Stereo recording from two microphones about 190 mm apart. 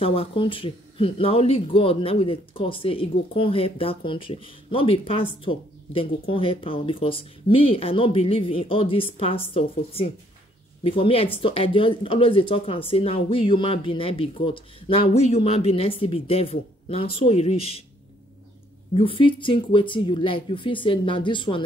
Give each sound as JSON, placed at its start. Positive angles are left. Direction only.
{"t": 0.0, "sound": "speech", "side_deg": 30}
{"t": 18.9, "sound": "speech", "side_deg": 30}